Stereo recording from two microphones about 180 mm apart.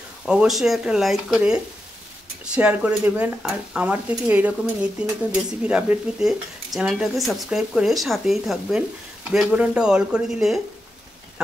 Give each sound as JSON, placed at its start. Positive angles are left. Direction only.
{"t": 0.2, "sound": "speech", "side_deg": -5}